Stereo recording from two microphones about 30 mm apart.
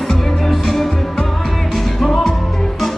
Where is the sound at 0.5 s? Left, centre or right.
Centre.